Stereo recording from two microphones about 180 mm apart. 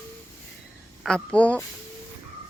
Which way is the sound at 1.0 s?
5° left (ahead or behind).